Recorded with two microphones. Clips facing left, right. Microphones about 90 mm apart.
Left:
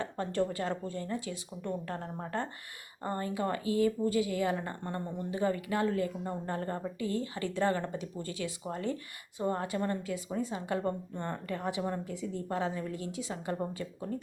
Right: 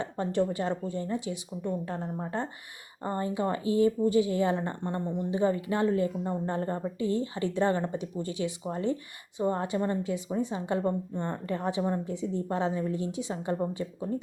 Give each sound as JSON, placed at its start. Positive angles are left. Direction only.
{"t": 0.0, "sound": "speech", "side_deg": -20}